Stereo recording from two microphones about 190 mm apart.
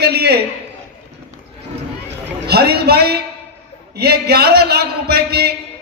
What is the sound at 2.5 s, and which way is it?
A man's voice, 55° right (ahead or behind).